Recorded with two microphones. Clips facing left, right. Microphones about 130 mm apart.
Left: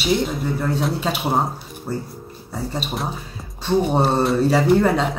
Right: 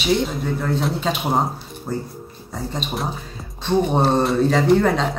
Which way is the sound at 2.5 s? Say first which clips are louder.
Left 1 dB; 5° left (ahead or behind).